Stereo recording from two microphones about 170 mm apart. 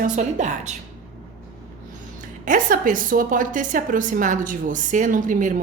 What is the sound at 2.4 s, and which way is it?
A woman's voice, 55° right (ahead or behind).